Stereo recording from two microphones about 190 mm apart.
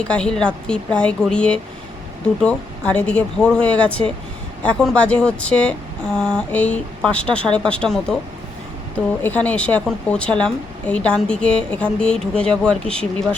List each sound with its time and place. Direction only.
0.0 s a woman's voice: 5° left (ahead or behind)
9.2 s a woman's voice: 10° left (ahead or behind)